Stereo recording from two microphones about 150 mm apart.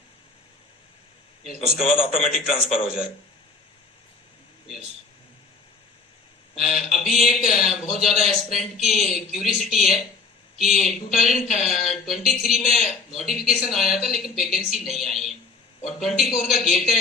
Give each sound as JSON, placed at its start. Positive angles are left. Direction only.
{"t": 1.5, "sound": "speech", "side_deg": -5}
{"t": 6.6, "sound": "speech", "side_deg": 0}
{"t": 11.3, "sound": "speech", "side_deg": 55}
{"t": 11.6, "sound": "speech", "side_deg": 0}